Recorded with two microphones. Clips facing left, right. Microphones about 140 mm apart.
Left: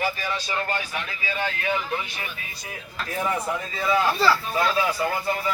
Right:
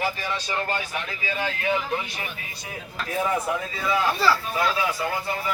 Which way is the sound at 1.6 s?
20° right (ahead or behind).